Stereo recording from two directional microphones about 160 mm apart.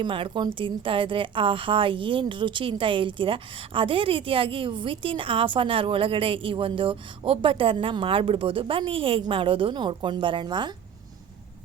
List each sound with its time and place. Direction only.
0.0 s a woman's voice: 30° right (ahead or behind)